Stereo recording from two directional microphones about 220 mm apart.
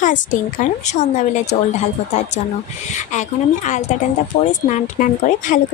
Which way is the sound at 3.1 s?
35° left (ahead or behind).